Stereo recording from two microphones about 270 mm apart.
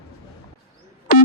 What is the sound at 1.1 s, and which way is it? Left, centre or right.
Music, left.